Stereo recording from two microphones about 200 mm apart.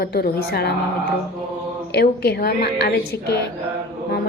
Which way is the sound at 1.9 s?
55° left (ahead or behind).